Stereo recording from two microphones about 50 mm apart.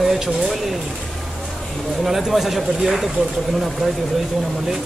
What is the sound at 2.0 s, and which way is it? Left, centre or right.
Speech, centre.